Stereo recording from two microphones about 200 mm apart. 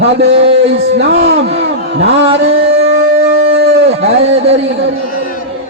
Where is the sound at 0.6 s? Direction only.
70° right (ahead or behind).